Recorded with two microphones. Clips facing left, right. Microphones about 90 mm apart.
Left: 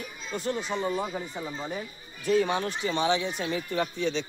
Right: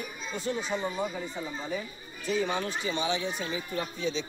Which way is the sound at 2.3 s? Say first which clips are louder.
Left 4 dB; 70° left (ahead or behind).